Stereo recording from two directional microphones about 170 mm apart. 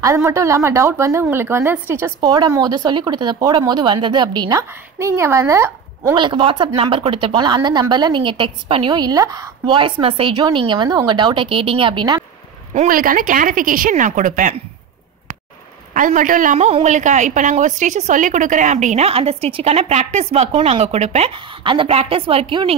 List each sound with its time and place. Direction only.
0.0 s a woman's voice: 15° right (ahead or behind)
12.7 s a woman's voice: 55° right (ahead or behind)
15.9 s a woman's voice: 50° right (ahead or behind); by 22.8 s 30° right (ahead or behind)